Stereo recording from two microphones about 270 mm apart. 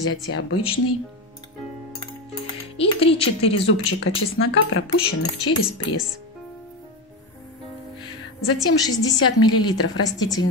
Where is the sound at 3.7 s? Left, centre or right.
Left.